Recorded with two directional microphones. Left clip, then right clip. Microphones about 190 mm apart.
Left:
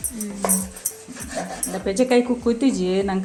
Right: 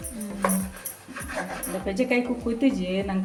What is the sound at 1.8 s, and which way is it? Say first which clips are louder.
A woman's voice: left 7 dB; 30° left (ahead or behind).